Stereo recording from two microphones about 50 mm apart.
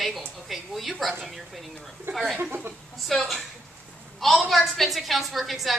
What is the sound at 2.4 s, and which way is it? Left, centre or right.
Speech, right.